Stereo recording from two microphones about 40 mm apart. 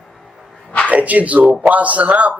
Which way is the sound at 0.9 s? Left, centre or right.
Right.